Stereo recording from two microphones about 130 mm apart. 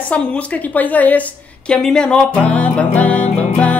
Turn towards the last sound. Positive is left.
turn(degrees=10)  # may be behind; listen again after turning